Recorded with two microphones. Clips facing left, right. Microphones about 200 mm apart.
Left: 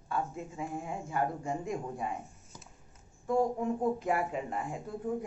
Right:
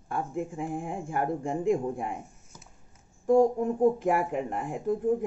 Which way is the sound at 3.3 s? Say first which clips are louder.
Right 7 dB; 45° right (ahead or behind).